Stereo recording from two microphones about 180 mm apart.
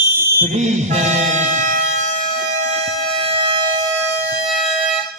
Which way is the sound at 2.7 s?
35° right (ahead or behind).